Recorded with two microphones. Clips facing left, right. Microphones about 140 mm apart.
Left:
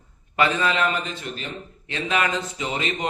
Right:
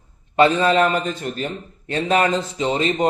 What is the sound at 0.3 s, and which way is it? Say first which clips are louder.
Speech: right 7 dB; 35° right (ahead or behind).